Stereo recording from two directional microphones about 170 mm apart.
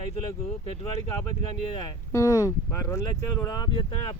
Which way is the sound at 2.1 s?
20° left (ahead or behind).